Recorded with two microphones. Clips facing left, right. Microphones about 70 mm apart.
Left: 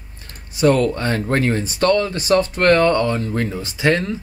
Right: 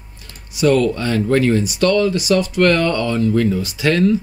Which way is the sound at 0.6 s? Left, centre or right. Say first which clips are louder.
Right 1 dB; left.